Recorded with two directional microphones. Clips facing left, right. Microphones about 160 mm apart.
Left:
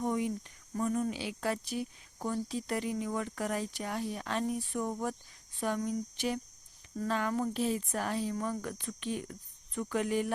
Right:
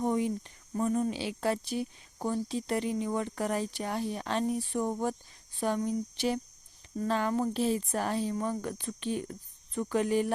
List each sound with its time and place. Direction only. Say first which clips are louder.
0.0 s speech: right 3 dB; 30° right (ahead or behind)